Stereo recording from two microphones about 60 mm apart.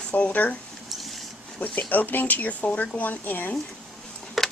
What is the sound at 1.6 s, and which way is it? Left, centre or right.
Speech, left.